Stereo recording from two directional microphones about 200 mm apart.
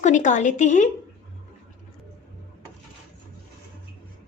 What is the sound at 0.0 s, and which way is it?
Speech, 40° left (ahead or behind).